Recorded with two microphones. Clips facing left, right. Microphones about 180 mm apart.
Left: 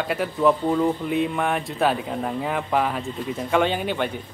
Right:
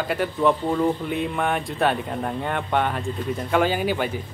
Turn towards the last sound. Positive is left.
turn(degrees=-5)  # may be behind; listen again after turning